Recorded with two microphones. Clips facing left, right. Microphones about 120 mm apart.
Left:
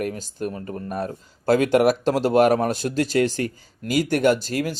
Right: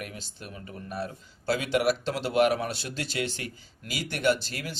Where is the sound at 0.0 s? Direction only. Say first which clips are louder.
Left 13 dB; 45° left (ahead or behind).